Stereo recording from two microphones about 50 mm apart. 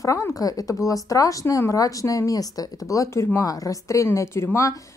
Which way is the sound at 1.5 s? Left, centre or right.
Left.